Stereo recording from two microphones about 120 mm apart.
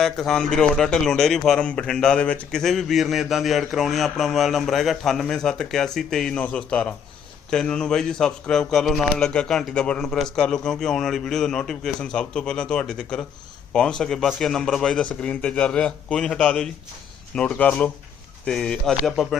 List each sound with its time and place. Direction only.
0.0 s a man's voice: 5° left (ahead or behind)